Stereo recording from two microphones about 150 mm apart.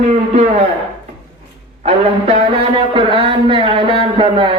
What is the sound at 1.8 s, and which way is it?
A man's voice, 40° right (ahead or behind).